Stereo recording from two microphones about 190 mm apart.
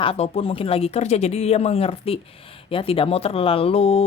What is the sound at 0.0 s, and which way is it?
Speech, 30° left (ahead or behind).